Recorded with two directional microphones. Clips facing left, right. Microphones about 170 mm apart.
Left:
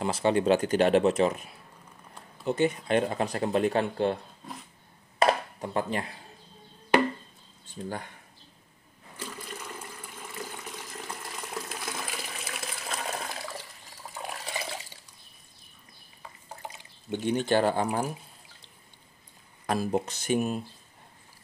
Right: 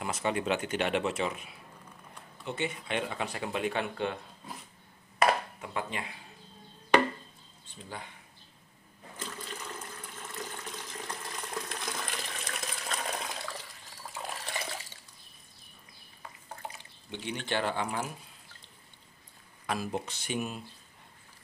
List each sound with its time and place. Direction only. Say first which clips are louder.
0.0 s speech: left 7 dB; 30° left (ahead or behind)
5.2 s a sound: left 3 dB; 40° left (ahead or behind)
7.7 s speech: left 8 dB; 45° left (ahead or behind)
9.1 s toilet flush: left 2 dB; 10° left (ahead or behind)
14.1 s water: left 2 dB; centre (ahead or behind)
17.1 s speech: left 9 dB; 45° left (ahead or behind)
19.6 s speech: left 6 dB; 40° left (ahead or behind)